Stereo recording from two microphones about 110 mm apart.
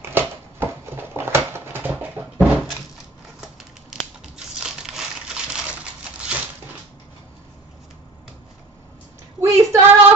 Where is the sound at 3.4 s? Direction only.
5° right (ahead or behind).